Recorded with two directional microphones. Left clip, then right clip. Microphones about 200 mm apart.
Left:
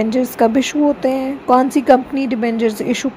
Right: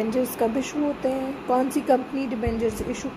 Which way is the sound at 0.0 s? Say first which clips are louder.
Left 9 dB; 45° left (ahead or behind).